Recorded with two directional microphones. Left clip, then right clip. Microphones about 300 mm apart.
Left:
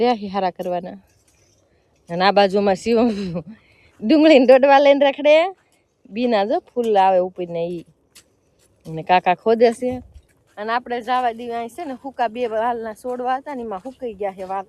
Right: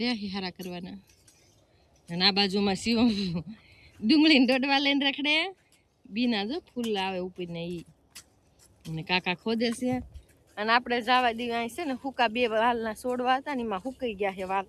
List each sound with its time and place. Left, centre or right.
0.0 s speech: centre
2.1 s speech: centre
8.9 s speech: centre
9.8 s speech: centre
10.5 s speech: centre
13.7 s speech: centre
14.0 s speech: centre